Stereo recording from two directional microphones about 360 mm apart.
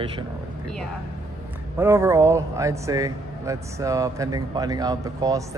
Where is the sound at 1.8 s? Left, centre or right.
Centre.